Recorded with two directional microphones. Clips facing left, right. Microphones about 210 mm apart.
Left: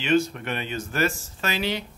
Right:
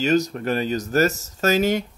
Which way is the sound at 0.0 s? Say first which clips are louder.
Right 2 dB; 40° right (ahead or behind).